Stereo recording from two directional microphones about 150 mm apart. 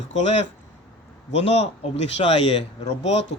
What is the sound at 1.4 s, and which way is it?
Speech, 45° left (ahead or behind).